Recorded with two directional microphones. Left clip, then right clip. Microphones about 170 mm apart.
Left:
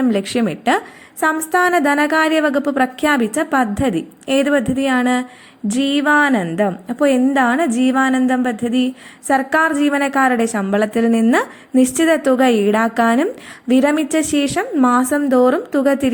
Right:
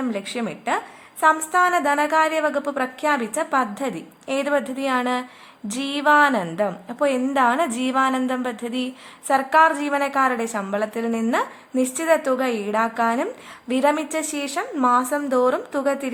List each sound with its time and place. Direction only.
0.0 s a woman's voice: 20° left (ahead or behind)